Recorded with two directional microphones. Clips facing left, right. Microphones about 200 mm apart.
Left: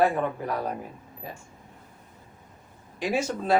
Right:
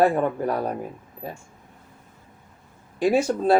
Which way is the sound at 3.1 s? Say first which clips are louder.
Right 4 dB; 35° right (ahead or behind).